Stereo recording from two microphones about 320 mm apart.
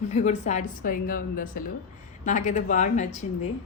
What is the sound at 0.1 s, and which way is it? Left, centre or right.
A woman's voice, left.